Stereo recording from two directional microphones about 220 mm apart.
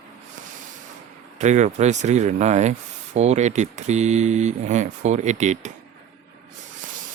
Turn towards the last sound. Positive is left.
turn(degrees=-30)  # may be behind; listen again after turning